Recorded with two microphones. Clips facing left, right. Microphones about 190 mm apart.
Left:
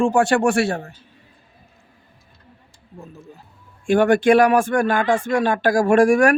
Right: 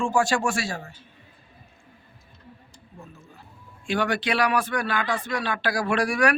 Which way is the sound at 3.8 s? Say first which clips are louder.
Left 10 dB; 50° left (ahead or behind).